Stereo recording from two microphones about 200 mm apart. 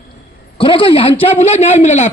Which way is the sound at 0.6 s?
25° left (ahead or behind).